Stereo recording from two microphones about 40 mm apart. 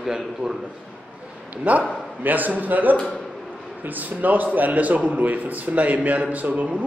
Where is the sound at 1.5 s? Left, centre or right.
Right.